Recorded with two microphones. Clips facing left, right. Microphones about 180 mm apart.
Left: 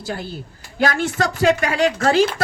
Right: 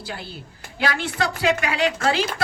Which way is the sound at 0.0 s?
45° left (ahead or behind).